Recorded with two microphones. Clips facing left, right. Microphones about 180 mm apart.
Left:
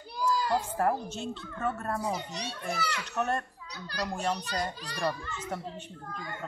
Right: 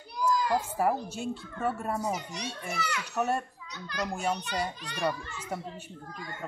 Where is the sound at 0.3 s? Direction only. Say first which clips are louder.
Right 1 dB; 30° left (ahead or behind).